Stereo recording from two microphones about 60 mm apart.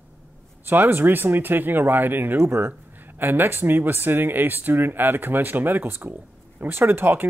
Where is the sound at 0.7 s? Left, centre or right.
Right.